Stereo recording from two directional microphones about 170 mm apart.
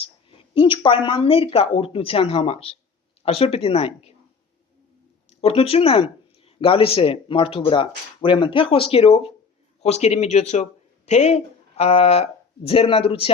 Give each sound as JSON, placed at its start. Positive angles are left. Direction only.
{"t": 0.0, "sound": "speech", "side_deg": 30}
{"t": 5.4, "sound": "speech", "side_deg": 35}